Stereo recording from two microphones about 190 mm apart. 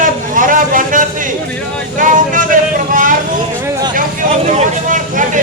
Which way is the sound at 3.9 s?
40° right (ahead or behind).